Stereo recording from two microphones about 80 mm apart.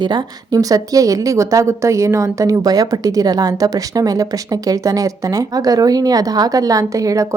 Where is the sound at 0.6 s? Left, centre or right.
Right.